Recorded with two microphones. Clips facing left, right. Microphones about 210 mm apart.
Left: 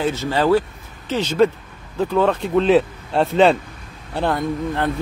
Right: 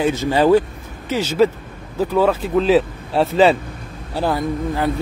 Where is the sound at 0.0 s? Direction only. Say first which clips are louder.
Right 3 dB; 15° right (ahead or behind).